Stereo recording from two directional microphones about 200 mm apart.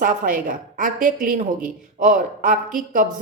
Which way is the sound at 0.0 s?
45° right (ahead or behind).